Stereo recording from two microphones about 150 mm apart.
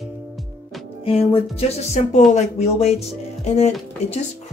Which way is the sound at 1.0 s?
40° left (ahead or behind).